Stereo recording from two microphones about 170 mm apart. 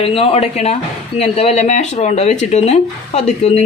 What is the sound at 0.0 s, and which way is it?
A man's voice, 35° left (ahead or behind).